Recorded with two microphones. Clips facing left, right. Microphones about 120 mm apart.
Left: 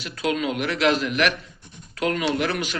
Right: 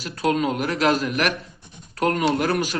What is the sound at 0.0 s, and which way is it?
A man's voice, 40° right (ahead or behind).